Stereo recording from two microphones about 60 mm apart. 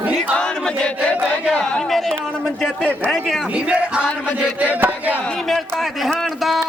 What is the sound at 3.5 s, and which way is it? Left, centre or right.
Speech, right.